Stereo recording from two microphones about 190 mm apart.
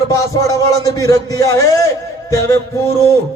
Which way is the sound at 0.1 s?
20° left (ahead or behind).